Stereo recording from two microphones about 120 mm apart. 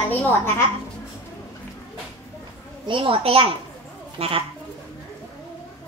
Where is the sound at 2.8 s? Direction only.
45° right (ahead or behind).